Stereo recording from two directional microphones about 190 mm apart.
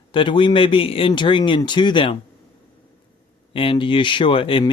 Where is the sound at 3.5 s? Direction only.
25° left (ahead or behind).